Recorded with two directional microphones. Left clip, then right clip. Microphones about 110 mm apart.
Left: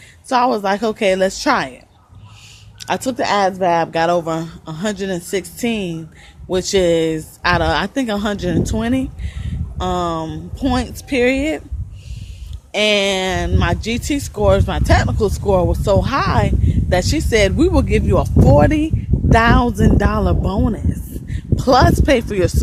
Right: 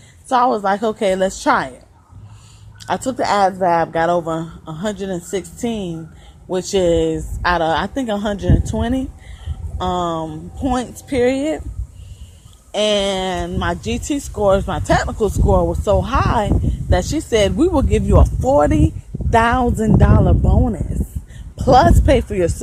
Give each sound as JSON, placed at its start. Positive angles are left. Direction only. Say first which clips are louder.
{"t": 0.3, "sound": "speech", "louder": "even", "side_deg": 35}
{"t": 2.8, "sound": "speech", "louder": "even", "side_deg": 35}
{"t": 3.7, "sound": "speech", "louder": "even", "side_deg": 40}
{"t": 10.8, "sound": "speech", "louder": "left 1 dB", "side_deg": 30}
{"t": 12.7, "sound": "speech", "louder": "left 2 dB", "side_deg": 35}